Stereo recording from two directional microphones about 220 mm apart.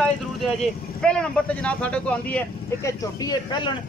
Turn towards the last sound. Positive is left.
turn(degrees=20)  # may be behind; listen again after turning